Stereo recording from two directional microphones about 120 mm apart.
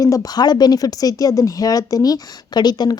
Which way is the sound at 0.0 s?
30° left (ahead or behind).